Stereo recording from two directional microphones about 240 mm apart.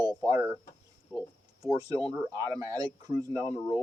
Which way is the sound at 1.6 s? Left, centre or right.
Centre.